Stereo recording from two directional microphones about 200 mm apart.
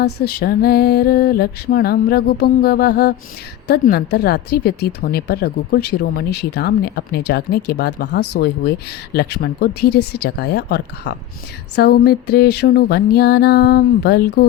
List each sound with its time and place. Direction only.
0.0 s a woman's voice: 50° left (ahead or behind)